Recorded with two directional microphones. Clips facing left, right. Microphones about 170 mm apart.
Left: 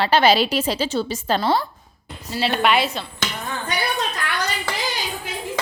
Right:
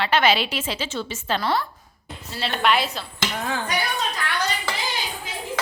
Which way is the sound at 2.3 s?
5° left (ahead or behind).